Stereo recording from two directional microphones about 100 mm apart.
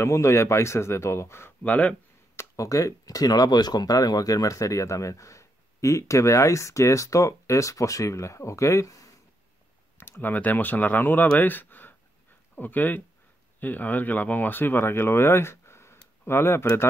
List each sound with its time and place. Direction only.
0.0 s speech: 30° left (ahead or behind)
2.3 s speech: 30° left (ahead or behind)
9.9 s speech: 20° left (ahead or behind)